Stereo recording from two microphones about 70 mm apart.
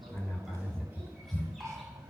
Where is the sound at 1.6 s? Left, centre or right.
Right.